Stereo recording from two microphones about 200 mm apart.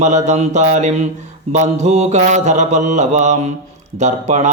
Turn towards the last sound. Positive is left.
turn(degrees=-35)  # may be behind; listen again after turning